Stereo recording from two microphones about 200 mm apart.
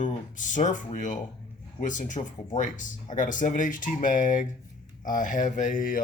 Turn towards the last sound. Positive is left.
turn(degrees=45)  # may be behind; listen again after turning